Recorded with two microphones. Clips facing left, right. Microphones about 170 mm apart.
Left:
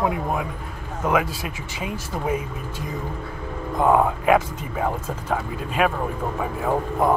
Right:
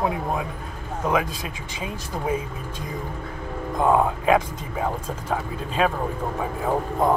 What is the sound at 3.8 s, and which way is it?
Speech, 15° left (ahead or behind).